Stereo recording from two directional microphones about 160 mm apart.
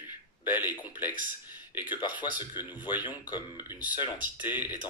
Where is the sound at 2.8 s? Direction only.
10° right (ahead or behind).